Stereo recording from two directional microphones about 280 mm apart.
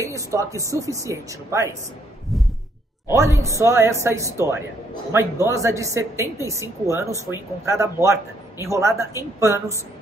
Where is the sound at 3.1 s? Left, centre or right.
Centre.